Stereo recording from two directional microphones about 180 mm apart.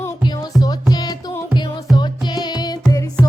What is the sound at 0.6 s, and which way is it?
Music, 20° left (ahead or behind).